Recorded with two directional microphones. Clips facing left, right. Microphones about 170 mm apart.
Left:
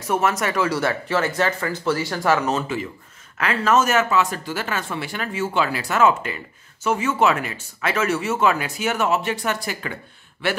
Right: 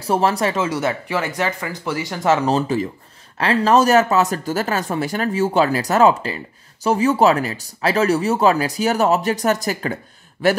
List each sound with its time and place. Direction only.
0.0 s speech: 30° right (ahead or behind)